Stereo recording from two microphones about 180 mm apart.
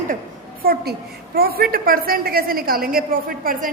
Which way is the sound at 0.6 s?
55° right (ahead or behind).